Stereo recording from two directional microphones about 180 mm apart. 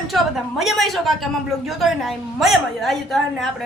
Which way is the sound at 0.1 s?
Centre (ahead or behind).